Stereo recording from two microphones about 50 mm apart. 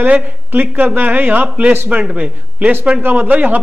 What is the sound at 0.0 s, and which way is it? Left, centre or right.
Speech, right.